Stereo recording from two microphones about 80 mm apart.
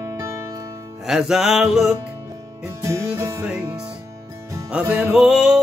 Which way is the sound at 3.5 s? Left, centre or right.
Centre.